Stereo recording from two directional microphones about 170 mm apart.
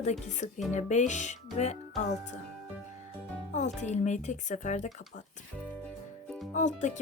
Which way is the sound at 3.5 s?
45° left (ahead or behind).